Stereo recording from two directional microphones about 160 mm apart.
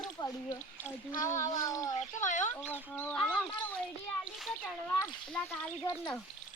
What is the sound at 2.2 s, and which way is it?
Speech, 50° left (ahead or behind).